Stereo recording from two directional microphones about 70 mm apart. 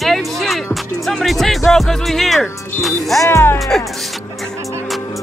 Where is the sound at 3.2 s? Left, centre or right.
Left.